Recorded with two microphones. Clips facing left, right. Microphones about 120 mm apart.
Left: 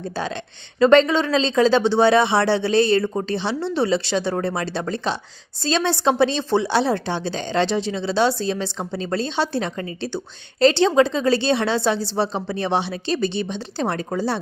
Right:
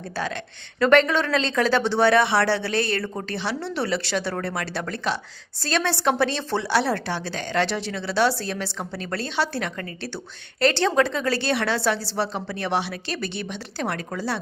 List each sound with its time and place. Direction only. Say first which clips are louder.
0.8 s speech: left 4 dB; 20° left (ahead or behind)